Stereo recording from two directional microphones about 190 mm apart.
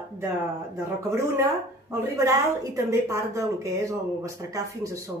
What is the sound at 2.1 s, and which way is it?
A woman's voice, 15° right (ahead or behind).